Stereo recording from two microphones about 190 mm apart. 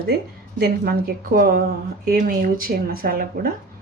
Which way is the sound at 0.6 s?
55° right (ahead or behind).